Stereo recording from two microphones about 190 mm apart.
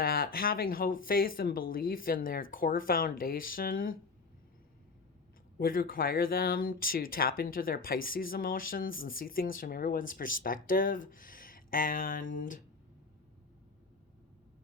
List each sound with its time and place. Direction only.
0.0 s speech: 50° left (ahead or behind)
5.5 s speech: 50° left (ahead or behind)